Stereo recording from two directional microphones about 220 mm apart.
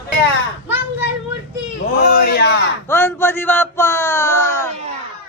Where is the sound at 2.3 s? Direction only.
55° left (ahead or behind).